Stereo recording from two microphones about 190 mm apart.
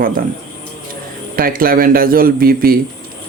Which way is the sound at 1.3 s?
50° right (ahead or behind).